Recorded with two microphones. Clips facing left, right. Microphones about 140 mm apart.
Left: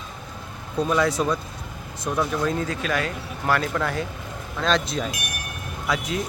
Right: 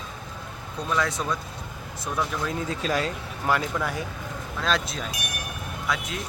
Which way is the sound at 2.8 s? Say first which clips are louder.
Even; 30° right (ahead or behind).